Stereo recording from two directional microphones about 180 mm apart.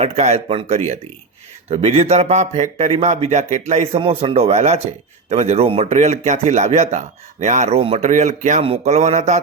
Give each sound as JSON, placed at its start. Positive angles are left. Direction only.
{"t": 0.0, "sound": "speech", "side_deg": -35}